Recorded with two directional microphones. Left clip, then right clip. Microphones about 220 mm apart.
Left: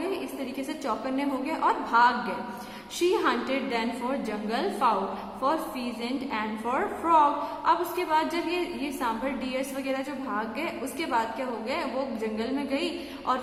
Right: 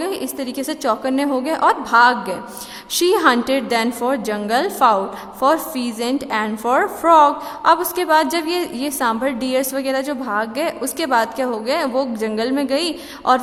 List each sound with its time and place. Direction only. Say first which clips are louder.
0.0 s a woman's voice: right 8 dB; 45° right (ahead or behind)